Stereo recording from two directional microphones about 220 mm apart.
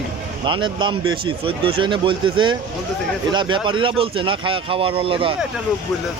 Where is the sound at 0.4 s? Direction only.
20° right (ahead or behind).